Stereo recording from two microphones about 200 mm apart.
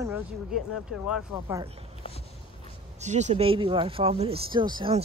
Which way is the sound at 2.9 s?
35° right (ahead or behind).